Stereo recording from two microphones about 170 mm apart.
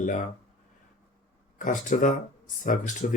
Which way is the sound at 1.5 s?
50° left (ahead or behind).